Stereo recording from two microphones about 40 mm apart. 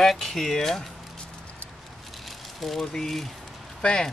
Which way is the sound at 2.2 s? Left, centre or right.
Centre.